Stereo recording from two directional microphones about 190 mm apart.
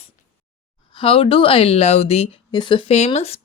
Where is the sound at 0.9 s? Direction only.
30° left (ahead or behind).